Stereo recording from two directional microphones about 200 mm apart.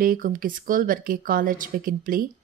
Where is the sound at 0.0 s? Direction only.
45° right (ahead or behind).